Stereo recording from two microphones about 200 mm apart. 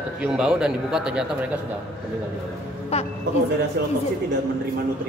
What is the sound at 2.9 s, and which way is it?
Speech, 30° left (ahead or behind).